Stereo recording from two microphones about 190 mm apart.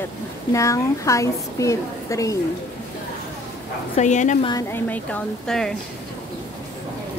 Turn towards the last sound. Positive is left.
turn(degrees=5)  # may be behind; listen again after turning